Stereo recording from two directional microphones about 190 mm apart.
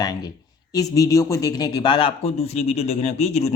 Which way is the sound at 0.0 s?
20° left (ahead or behind).